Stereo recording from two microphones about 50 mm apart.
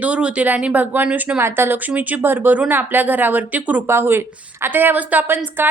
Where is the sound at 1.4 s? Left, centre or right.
Right.